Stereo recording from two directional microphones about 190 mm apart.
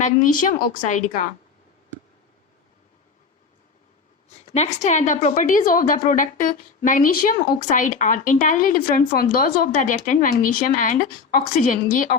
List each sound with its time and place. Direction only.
0.0 s a woman's voice: 45° left (ahead or behind)
4.5 s a woman's voice: 35° left (ahead or behind)